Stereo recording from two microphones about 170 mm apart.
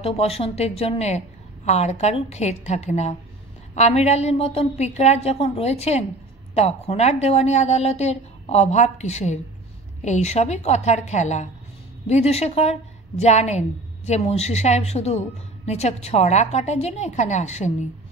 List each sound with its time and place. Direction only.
0.0 s a woman's voice: 35° left (ahead or behind)